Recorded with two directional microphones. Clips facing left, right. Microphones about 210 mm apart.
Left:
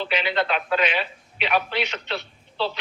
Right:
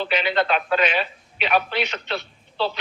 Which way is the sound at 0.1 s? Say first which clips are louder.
Right 2 dB; 45° right (ahead or behind).